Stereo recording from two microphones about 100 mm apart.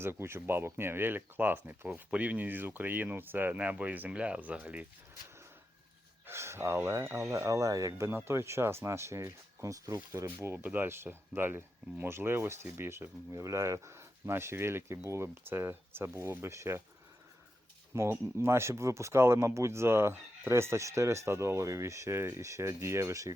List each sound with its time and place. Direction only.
0.0 s speech: 25° right (ahead or behind)
6.2 s speech: 25° right (ahead or behind)
10.2 s speech: 20° right (ahead or behind)
17.9 s speech: 25° right (ahead or behind)